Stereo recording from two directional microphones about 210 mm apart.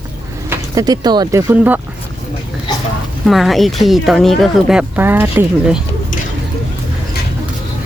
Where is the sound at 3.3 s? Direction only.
Centre (ahead or behind).